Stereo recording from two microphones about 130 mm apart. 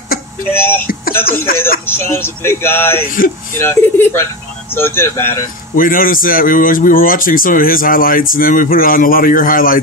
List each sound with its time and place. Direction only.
0.5 s speech: 15° left (ahead or behind)
5.8 s speech: 90° left